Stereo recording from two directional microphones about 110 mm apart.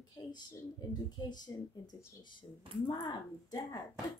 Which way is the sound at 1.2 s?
40° left (ahead or behind).